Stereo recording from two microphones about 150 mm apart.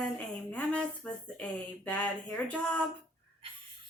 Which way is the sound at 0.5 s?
10° left (ahead or behind).